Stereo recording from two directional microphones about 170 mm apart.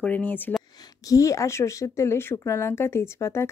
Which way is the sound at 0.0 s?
10° left (ahead or behind).